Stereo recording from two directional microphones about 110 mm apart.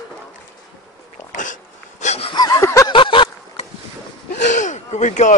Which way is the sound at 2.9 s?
50° left (ahead or behind).